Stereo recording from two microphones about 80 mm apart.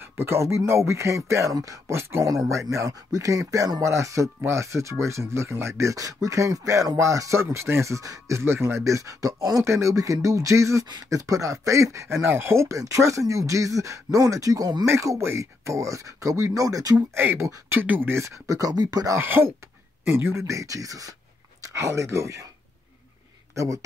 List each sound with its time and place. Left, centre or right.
0.0 s speech: right
8.4 s speech: right
14.9 s speech: right
17.1 s speech: right
19.1 s speech: right
20.4 s speech: right
23.5 s speech: right